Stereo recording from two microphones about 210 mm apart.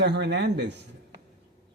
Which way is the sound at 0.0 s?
55° right (ahead or behind).